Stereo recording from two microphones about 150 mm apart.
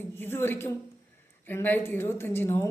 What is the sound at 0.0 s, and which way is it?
A woman's voice, 15° left (ahead or behind).